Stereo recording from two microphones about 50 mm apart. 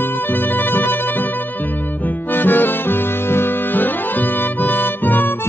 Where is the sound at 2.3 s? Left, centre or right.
Left.